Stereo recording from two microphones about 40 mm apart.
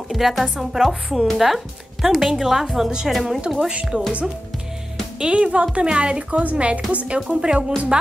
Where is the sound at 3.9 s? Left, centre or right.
Centre.